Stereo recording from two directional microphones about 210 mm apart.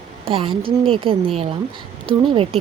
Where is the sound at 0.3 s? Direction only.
25° right (ahead or behind).